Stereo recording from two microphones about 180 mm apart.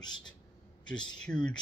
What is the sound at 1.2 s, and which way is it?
Speech, 5° left (ahead or behind).